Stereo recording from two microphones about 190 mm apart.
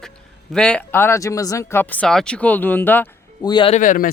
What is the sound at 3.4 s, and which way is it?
Speech, 25° left (ahead or behind).